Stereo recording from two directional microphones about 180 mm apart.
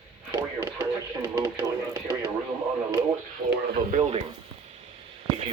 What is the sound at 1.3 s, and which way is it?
Radio, 15° right (ahead or behind).